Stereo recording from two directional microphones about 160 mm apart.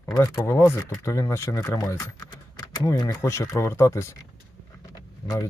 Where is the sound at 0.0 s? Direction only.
20° left (ahead or behind).